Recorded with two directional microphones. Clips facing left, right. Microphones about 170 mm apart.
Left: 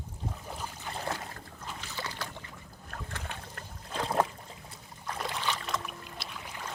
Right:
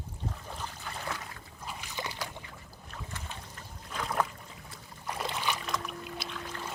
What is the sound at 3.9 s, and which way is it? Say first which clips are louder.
Boat: left 3 dB; 30° left (ahead or behind).